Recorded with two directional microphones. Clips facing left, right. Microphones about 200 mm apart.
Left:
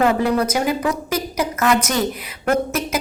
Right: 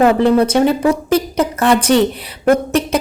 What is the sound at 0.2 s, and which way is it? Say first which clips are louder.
A woman's voice: right 7 dB; 30° right (ahead or behind).